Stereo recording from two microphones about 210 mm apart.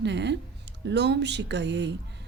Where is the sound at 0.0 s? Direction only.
55° right (ahead or behind).